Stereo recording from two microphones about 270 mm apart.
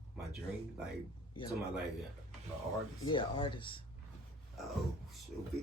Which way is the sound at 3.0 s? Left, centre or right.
Centre.